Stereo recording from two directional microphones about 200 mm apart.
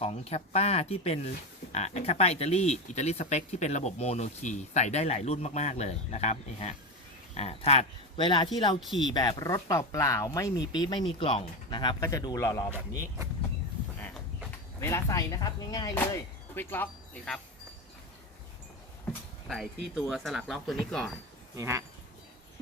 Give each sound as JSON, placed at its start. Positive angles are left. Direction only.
{"t": 0.0, "sound": "speech", "side_deg": 30}
{"t": 8.8, "sound": "speech", "side_deg": 0}
{"t": 9.0, "sound": "speech", "side_deg": 20}
{"t": 14.0, "sound": "a sound", "side_deg": 0}
{"t": 14.8, "sound": "speech", "side_deg": 15}
{"t": 19.5, "sound": "speech", "side_deg": 0}
{"t": 21.5, "sound": "speech", "side_deg": -15}